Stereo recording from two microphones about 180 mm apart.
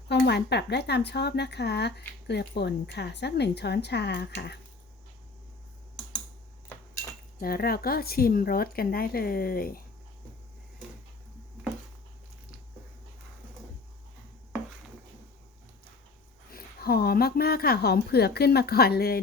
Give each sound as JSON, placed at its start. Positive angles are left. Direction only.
{"t": 0.1, "sound": "a woman's voice", "side_deg": 70}
{"t": 6.7, "sound": "a sound", "side_deg": 10}
{"t": 7.3, "sound": "speech", "side_deg": 55}
{"t": 16.5, "sound": "a woman's voice", "side_deg": 55}